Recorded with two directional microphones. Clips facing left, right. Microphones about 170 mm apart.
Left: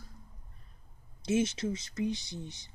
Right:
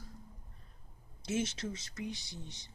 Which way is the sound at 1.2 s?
15° left (ahead or behind).